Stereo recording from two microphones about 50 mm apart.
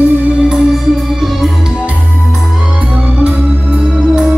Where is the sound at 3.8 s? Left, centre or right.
Centre.